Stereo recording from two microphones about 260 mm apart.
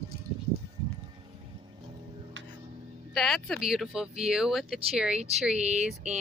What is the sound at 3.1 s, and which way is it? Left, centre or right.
Speech, centre.